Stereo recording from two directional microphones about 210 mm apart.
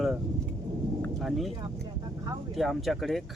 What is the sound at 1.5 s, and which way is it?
Vehicle, 15° right (ahead or behind).